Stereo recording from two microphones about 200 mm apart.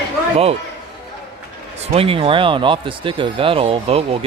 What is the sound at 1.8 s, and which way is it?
Speech, 30° right (ahead or behind).